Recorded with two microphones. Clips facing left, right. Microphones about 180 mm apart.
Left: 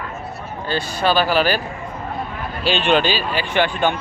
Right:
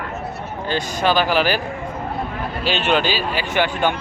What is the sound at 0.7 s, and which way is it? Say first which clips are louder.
Speech: even; 15° right (ahead or behind).